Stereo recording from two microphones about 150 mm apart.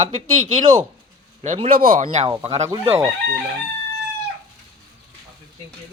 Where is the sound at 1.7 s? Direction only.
65° right (ahead or behind).